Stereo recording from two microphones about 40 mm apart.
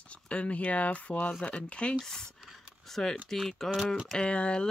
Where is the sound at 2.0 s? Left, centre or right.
Centre.